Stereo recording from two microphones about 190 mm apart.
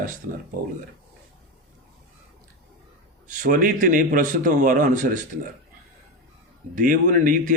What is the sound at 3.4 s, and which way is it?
Speech, 45° right (ahead or behind).